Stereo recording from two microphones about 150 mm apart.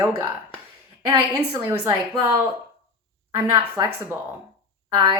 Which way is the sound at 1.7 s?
30° right (ahead or behind).